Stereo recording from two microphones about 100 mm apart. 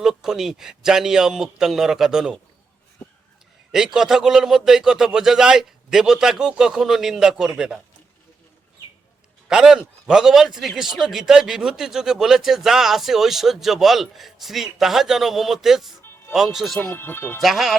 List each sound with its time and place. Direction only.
0.0 s a man's voice: 5° right (ahead or behind)
3.7 s a man's voice: 5° right (ahead or behind)
9.5 s a man's voice: 5° right (ahead or behind)
16.9 s speech: 20° left (ahead or behind)
17.4 s a man's voice: centre (ahead or behind)